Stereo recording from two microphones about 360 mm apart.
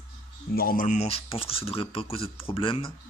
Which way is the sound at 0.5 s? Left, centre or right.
Left.